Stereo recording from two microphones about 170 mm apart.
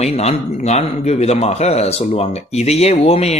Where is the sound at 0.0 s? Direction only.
40° left (ahead or behind).